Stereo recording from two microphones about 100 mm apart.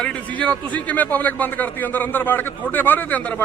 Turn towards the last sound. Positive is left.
turn(degrees=15)  # may be behind; listen again after turning